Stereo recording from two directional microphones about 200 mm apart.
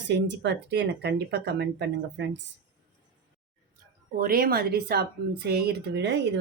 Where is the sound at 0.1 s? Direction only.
60° right (ahead or behind).